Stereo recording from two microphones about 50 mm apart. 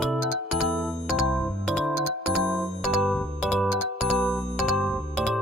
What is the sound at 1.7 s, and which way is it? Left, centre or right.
Music, centre.